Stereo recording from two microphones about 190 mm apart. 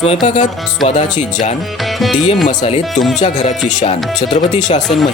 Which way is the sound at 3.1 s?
40° left (ahead or behind).